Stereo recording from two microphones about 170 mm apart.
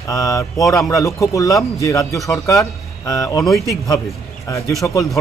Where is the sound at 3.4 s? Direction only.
Centre (ahead or behind).